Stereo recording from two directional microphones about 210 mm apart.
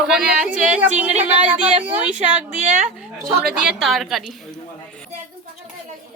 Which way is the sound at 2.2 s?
35° right (ahead or behind).